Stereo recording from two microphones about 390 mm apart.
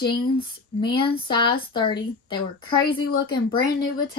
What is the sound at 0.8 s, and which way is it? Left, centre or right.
Speech, centre.